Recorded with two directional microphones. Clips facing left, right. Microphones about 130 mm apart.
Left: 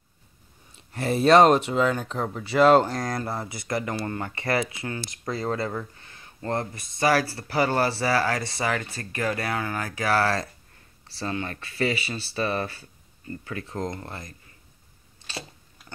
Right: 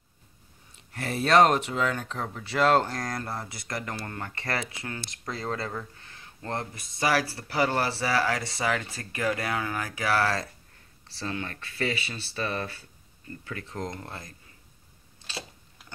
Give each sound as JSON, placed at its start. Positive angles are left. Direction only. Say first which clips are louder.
{"t": 0.9, "sound": "speech", "louder": "left 4 dB", "side_deg": 25}
{"t": 13.8, "sound": "speech", "louder": "left 3 dB", "side_deg": 5}